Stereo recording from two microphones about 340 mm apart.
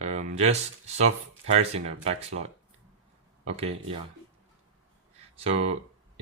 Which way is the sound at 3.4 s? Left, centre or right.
Centre.